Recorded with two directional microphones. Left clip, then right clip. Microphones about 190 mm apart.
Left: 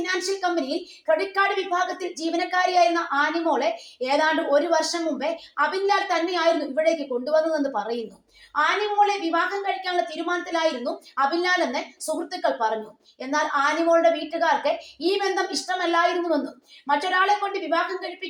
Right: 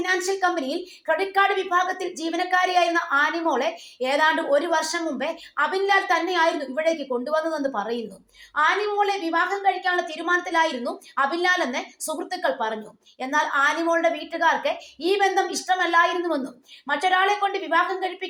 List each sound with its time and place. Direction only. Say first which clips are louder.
0.0 s a woman's voice: right 3 dB; 25° right (ahead or behind)